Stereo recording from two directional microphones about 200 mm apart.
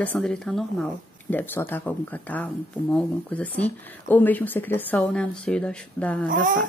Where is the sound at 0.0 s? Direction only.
5° left (ahead or behind).